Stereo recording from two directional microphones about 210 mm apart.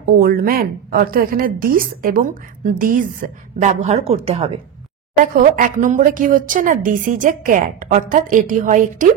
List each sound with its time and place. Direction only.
0.0 s a woman's voice: 45° right (ahead or behind); by 4.5 s 30° right (ahead or behind)
5.2 s speech: 40° right (ahead or behind)